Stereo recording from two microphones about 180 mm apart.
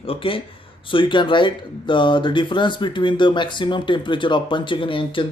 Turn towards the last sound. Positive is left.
turn(degrees=30)  # may be behind; listen again after turning